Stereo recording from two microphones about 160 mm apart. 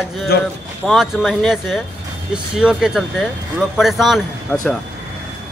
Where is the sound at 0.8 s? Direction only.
Centre (ahead or behind).